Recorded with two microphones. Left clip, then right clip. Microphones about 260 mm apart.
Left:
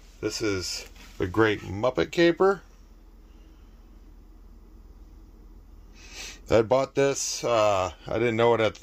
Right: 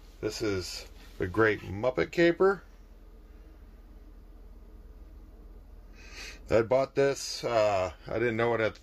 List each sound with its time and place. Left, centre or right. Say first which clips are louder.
0.2 s speech: left 3 dB; left
5.9 s speech: left 4 dB; centre